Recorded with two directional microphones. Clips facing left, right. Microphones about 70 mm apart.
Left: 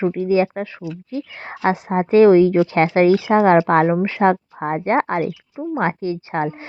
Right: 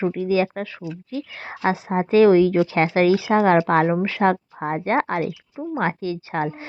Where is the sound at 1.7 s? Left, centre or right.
Left.